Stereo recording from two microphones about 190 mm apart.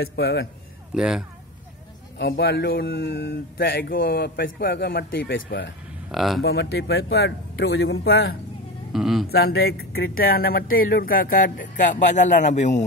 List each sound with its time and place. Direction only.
0.0 s speech: 55° left (ahead or behind)
0.9 s speech: 5° right (ahead or behind)
2.1 s speech: 60° left (ahead or behind)
6.1 s speech: centre (ahead or behind)
6.4 s speech: 60° left (ahead or behind)
8.9 s speech: centre (ahead or behind)
9.3 s speech: 55° left (ahead or behind); by 12.8 s 40° left (ahead or behind)